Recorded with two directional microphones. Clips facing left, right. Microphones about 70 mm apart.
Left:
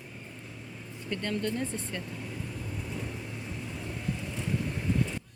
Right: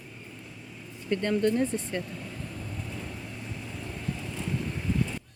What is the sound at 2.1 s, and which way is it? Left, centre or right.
Vehicle, centre.